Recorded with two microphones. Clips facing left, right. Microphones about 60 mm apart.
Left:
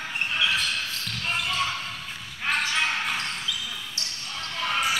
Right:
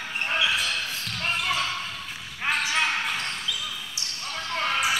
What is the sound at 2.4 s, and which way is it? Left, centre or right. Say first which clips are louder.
Basketball bounce: even; centre.